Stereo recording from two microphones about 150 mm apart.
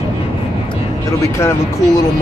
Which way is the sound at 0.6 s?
20° left (ahead or behind).